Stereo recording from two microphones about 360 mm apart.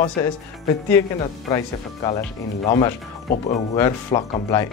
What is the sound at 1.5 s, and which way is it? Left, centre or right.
Speech, centre.